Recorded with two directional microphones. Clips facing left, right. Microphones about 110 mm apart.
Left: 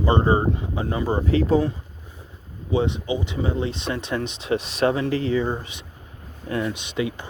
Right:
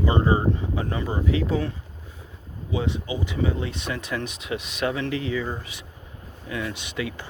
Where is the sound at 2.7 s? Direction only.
25° left (ahead or behind).